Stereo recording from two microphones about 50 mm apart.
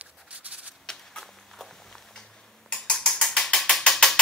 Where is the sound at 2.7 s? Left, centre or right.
Centre.